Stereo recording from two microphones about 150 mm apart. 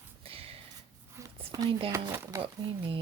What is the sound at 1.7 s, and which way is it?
Speech, 35° right (ahead or behind).